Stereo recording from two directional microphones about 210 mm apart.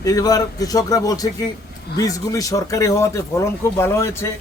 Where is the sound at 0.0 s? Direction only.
15° left (ahead or behind).